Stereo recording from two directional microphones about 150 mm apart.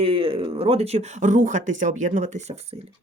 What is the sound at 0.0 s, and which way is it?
Speech, 40° right (ahead or behind).